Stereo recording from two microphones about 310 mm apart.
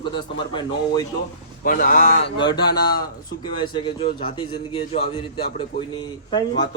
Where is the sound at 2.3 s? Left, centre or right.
Centre.